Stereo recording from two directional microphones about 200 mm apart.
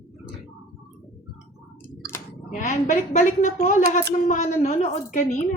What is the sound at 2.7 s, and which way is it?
A woman's voice, 40° left (ahead or behind).